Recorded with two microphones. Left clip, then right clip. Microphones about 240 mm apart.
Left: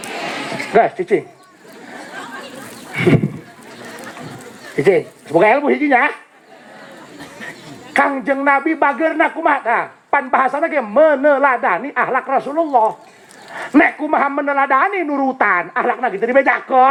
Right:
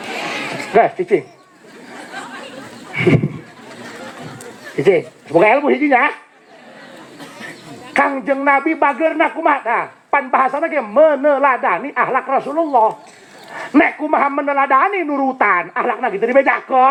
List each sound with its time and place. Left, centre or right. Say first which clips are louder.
0.7 s speech: right 1 dB; left
2.9 s horse: even; left
4.8 s speech: even; left
7.9 s speech: even; left